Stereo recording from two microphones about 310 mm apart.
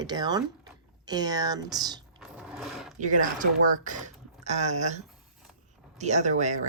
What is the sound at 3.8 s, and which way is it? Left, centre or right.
Speech, right.